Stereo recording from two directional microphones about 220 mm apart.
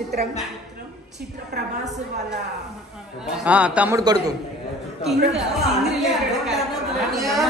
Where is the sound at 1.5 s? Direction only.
45° right (ahead or behind).